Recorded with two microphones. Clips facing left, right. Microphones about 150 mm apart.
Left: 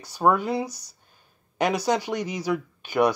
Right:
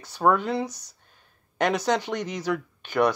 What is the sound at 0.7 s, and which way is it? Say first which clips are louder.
Speech: right 1 dB; 35° left (ahead or behind).